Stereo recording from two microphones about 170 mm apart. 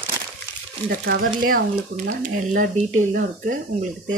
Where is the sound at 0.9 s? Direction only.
55° right (ahead or behind).